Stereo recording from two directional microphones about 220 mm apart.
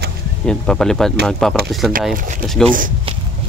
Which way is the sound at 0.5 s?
5° left (ahead or behind).